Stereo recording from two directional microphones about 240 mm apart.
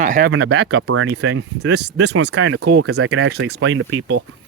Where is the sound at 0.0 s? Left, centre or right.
Right.